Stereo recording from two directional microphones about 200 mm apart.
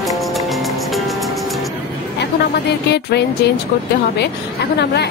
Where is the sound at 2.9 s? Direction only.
55° left (ahead or behind).